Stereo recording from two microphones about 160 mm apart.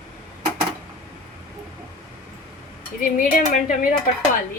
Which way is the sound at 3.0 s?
55° left (ahead or behind).